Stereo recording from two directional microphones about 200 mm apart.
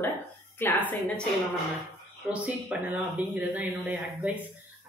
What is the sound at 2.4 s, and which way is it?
A woman's voice, 5° right (ahead or behind).